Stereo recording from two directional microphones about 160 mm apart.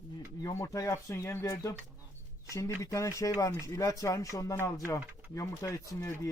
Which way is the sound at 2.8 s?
20° left (ahead or behind).